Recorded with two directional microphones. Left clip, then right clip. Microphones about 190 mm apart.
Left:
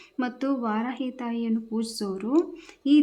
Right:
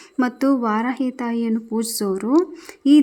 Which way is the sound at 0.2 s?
35° right (ahead or behind).